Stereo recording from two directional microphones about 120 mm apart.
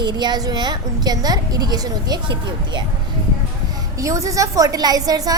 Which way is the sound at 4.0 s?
25° right (ahead or behind).